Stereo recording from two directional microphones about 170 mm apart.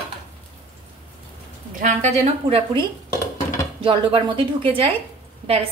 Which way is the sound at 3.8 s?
30° right (ahead or behind).